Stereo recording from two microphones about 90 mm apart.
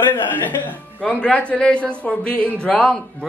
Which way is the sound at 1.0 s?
10° left (ahead or behind).